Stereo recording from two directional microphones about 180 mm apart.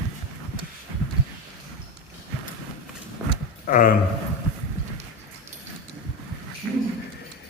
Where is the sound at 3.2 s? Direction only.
10° right (ahead or behind).